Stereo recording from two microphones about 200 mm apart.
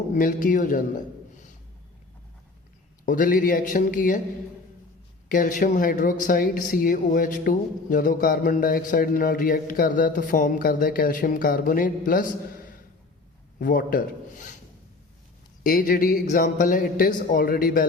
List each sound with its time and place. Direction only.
0.1 s a man's voice: 40° left (ahead or behind)
3.1 s speech: 45° left (ahead or behind)
5.3 s speech: 40° left (ahead or behind)
15.6 s speech: 45° left (ahead or behind)